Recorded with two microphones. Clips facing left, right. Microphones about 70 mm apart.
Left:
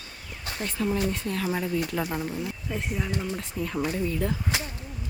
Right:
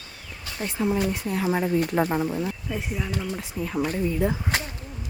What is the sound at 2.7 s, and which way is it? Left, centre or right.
Speech, centre.